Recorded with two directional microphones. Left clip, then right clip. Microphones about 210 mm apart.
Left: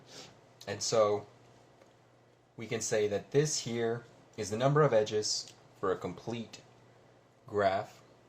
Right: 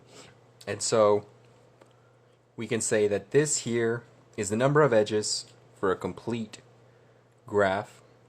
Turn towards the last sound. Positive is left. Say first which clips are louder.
# right 5 dB
turn(degrees=-45)  # may be behind; listen again after turning